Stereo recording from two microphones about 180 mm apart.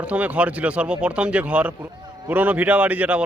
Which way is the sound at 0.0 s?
10° right (ahead or behind).